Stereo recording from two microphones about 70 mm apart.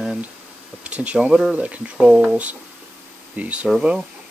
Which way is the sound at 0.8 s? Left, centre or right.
Centre.